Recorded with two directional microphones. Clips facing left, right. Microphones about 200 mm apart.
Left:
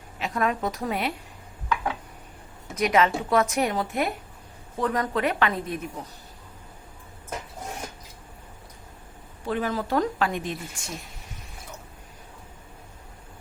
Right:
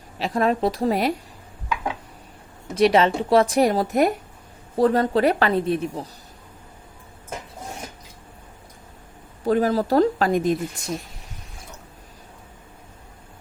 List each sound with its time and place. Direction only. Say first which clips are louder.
0.2 s speech: right 5 dB; 30° right (ahead or behind)
2.7 s speech: right 5 dB; 30° right (ahead or behind)
9.5 s speech: right 7 dB; 40° right (ahead or behind)